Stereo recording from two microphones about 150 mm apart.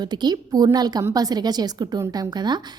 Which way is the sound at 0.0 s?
30° right (ahead or behind).